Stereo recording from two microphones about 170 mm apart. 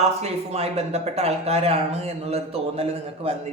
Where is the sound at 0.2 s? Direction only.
35° right (ahead or behind).